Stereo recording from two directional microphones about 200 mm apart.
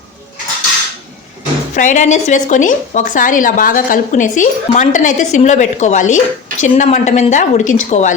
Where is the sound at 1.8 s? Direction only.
35° left (ahead or behind).